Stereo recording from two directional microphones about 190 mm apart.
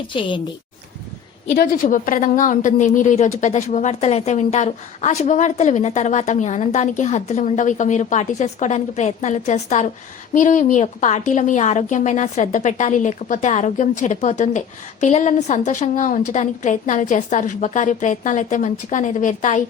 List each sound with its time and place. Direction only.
0.1 s a woman's voice: 25° left (ahead or behind)
1.5 s a woman's voice: 45° left (ahead or behind)